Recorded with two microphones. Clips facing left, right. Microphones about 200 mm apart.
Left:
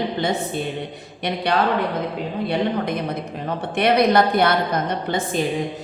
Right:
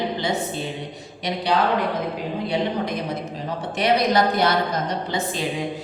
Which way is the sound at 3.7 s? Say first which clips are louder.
Left 3 dB; 60° left (ahead or behind).